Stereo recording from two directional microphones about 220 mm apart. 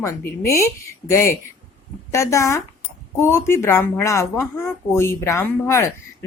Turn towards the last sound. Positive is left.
turn(degrees=10)  # may be behind; listen again after turning